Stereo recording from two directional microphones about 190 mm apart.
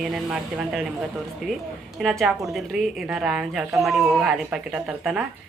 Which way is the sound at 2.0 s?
Centre (ahead or behind).